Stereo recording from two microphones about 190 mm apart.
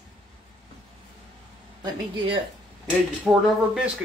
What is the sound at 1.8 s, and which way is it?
Speech, 25° right (ahead or behind).